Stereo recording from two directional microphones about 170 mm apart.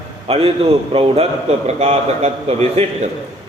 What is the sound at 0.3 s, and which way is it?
A man's voice, 35° right (ahead or behind).